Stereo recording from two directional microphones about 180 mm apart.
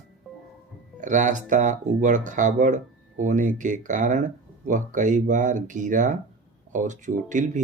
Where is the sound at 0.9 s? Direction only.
45° right (ahead or behind).